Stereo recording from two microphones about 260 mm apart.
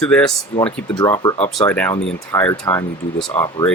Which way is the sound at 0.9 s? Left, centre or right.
Centre.